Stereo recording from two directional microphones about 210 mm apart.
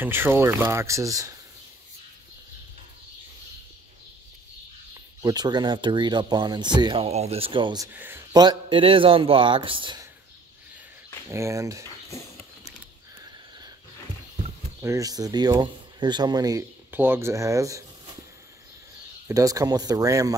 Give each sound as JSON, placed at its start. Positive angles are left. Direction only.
{"t": 0.0, "sound": "speech", "side_deg": -10}
{"t": 4.9, "sound": "speech", "side_deg": -20}
{"t": 7.9, "sound": "speech", "side_deg": -10}
{"t": 11.2, "sound": "speech", "side_deg": -15}
{"t": 14.8, "sound": "speech", "side_deg": -15}
{"t": 19.2, "sound": "speech", "side_deg": -15}